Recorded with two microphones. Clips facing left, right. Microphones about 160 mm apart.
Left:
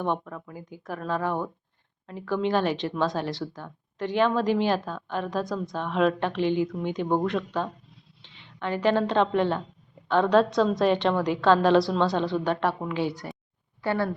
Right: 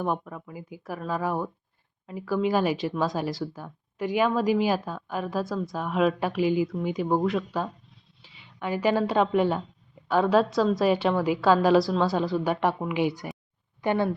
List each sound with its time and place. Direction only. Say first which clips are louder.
0.0 s a woman's voice: even; 5° right (ahead or behind)